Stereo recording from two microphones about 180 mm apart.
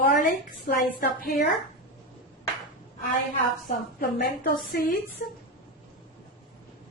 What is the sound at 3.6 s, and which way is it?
A woman's voice, 55° left (ahead or behind).